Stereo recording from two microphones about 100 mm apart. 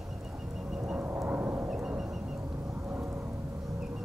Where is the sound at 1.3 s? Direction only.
20° right (ahead or behind).